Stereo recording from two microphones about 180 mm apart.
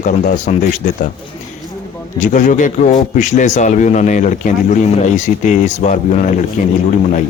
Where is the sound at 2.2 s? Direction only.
45° left (ahead or behind).